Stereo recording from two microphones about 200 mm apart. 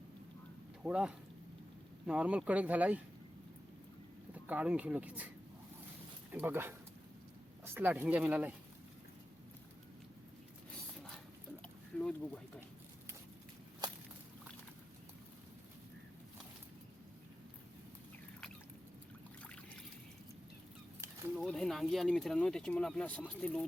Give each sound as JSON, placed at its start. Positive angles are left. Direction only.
{"t": 0.8, "sound": "speech", "side_deg": -5}
{"t": 4.4, "sound": "speech", "side_deg": -5}
{"t": 6.3, "sound": "speech", "side_deg": -10}
{"t": 11.6, "sound": "a sound", "side_deg": 5}
{"t": 13.8, "sound": "walk", "side_deg": -20}
{"t": 21.3, "sound": "speech", "side_deg": 0}